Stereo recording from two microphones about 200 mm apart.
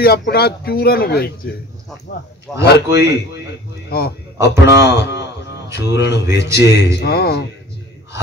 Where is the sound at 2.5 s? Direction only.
Centre (ahead or behind).